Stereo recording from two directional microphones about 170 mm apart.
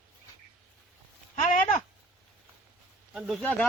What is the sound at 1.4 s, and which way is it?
Speech, 50° left (ahead or behind).